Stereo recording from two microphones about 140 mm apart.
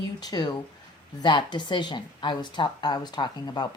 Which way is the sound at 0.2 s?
30° left (ahead or behind).